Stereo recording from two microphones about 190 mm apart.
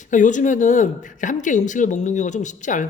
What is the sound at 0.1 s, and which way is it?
Speech, 40° left (ahead or behind).